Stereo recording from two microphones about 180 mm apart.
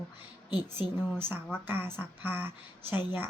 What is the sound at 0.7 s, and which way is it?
Speech, 10° right (ahead or behind).